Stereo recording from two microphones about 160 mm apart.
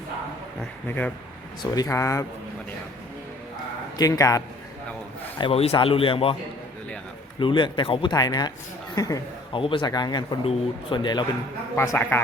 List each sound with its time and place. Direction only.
0.9 s a man's voice: 10° left (ahead or behind)
1.7 s speech: 20° left (ahead or behind)
3.9 s speech: 20° left (ahead or behind)
5.4 s speech: 40° left (ahead or behind)
7.3 s a woman's voice: 30° left (ahead or behind)
9.6 s speech: 30° left (ahead or behind)
11.8 s a man's voice: 15° left (ahead or behind)